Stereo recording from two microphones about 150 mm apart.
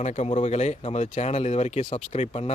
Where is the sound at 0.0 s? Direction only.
50° left (ahead or behind).